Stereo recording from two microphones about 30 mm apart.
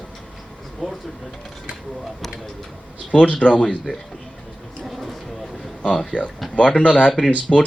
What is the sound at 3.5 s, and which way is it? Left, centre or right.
Speech, left.